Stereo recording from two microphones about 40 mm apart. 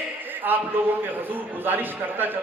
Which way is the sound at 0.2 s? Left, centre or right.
Right.